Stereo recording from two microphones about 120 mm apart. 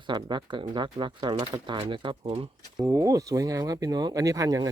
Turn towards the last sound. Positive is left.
turn(degrees=-25)  # may be behind; listen again after turning